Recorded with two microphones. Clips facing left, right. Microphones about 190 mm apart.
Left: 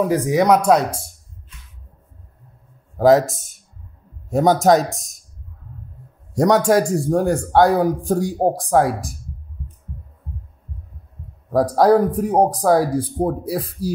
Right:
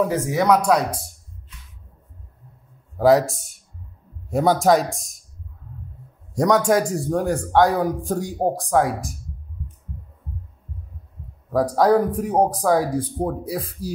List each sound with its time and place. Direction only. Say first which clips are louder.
0.3 s speech: left 4 dB; 20° left (ahead or behind)
4.3 s speech: left 3 dB; 20° left (ahead or behind)
6.3 s speech: left 3 dB; 30° left (ahead or behind)
11.5 s speech: left 3 dB; 35° left (ahead or behind)